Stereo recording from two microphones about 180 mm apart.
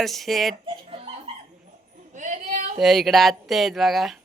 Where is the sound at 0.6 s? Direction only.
30° right (ahead or behind).